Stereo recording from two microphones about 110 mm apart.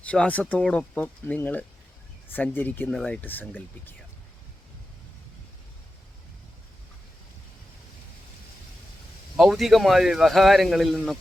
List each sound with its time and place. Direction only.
0.0 s speech: 10° left (ahead or behind)
9.3 s a man's voice: centre (ahead or behind)